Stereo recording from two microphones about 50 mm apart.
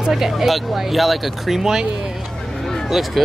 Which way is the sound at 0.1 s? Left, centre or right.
Centre.